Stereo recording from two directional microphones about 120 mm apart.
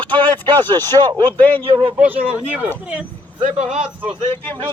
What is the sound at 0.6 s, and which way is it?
Speech, 35° right (ahead or behind).